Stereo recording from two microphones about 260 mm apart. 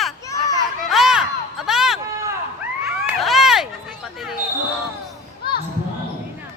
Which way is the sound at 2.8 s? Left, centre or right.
Centre.